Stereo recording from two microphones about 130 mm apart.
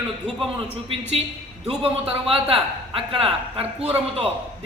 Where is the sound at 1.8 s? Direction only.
45° right (ahead or behind).